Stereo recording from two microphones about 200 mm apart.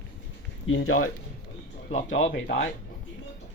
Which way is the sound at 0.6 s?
80° left.